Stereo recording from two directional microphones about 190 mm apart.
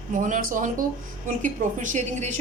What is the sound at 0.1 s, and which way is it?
Speech, 45° right (ahead or behind).